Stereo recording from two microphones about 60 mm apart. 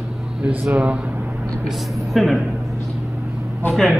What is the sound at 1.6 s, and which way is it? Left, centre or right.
A man's voice, centre.